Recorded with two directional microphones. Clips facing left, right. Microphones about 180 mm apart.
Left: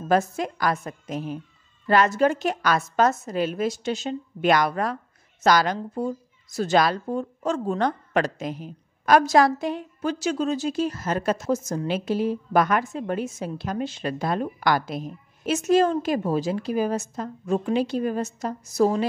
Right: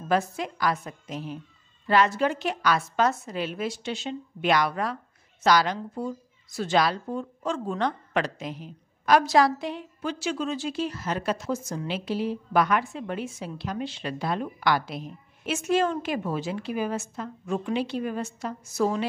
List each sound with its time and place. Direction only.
0.1 s a woman's voice: 45° left (ahead or behind)